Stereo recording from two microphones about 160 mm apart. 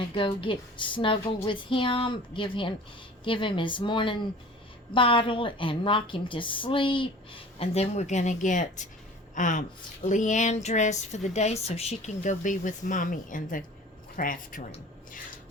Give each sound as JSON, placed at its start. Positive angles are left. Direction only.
{"t": 0.0, "sound": "a woman's voice", "side_deg": 30}